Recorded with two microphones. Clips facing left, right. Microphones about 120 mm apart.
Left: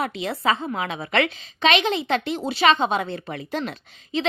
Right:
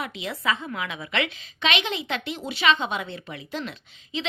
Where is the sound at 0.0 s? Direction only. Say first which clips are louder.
Left 5 dB; 35° left (ahead or behind).